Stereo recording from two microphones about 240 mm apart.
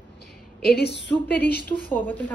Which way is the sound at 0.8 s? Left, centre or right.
Left.